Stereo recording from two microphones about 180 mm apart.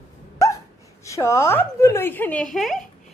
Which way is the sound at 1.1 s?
15° left (ahead or behind).